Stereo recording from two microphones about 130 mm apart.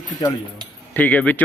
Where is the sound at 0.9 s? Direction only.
15° left (ahead or behind).